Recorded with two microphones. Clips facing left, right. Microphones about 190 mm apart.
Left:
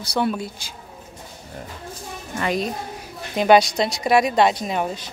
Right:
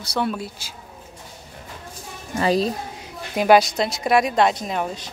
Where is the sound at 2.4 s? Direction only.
30° right (ahead or behind).